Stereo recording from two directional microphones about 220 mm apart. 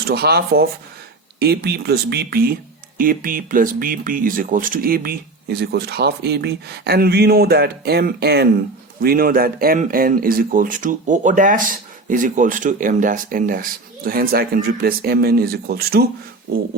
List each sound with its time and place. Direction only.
0.1 s speech: 45° right (ahead or behind)